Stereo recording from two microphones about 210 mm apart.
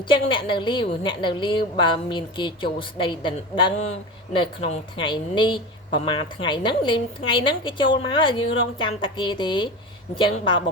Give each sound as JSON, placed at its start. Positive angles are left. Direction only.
{"t": 0.1, "sound": "a woman's voice", "side_deg": 25}